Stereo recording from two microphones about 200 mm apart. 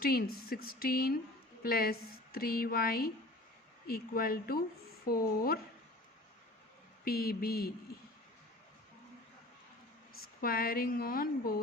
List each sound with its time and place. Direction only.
0.0 s a woman's voice: 50° left (ahead or behind)
7.0 s a woman's voice: 50° left (ahead or behind)
10.4 s a woman's voice: 45° left (ahead or behind)